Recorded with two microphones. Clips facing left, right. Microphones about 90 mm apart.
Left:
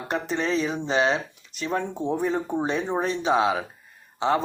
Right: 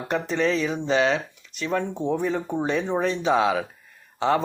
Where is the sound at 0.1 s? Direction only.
30° left (ahead or behind).